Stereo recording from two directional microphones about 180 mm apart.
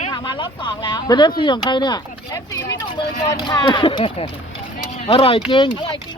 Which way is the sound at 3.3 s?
25° left (ahead or behind).